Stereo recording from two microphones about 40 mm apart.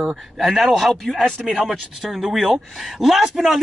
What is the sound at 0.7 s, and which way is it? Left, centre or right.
Speech, centre.